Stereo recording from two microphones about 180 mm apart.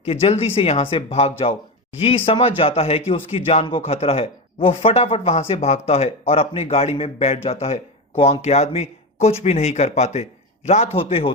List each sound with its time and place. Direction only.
0.0 s speech: 35° left (ahead or behind)